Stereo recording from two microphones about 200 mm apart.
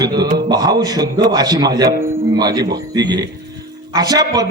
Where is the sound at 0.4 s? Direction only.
20° right (ahead or behind).